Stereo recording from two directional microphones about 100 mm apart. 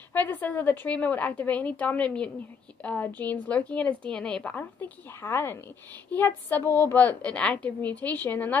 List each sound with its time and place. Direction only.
0.1 s a woman's voice: 15° left (ahead or behind)